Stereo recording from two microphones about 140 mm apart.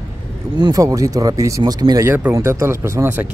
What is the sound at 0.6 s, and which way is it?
Speech, 25° right (ahead or behind).